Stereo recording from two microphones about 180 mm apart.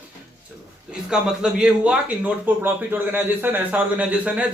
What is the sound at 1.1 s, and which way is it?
Speech, 5° right (ahead or behind).